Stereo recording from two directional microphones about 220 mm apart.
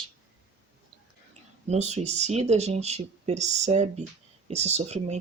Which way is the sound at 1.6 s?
30° right (ahead or behind).